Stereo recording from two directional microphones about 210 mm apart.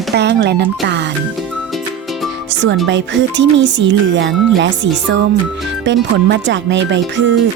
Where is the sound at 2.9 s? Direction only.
60° right (ahead or behind).